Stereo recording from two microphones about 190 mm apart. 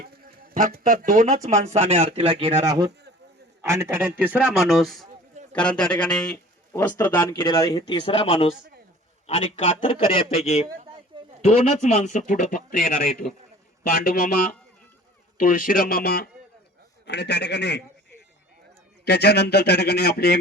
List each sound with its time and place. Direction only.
0.5 s speech: 45° right (ahead or behind)
2.6 s a man's voice: 20° right (ahead or behind); by 5.0 s centre (ahead or behind)
5.3 s a sound: 40° right (ahead or behind)
5.5 s a man's voice: 5° left (ahead or behind)
7.3 s a man's voice: 25° left (ahead or behind); by 17.8 s 60° left (ahead or behind)
19.0 s speech: 60° left (ahead or behind)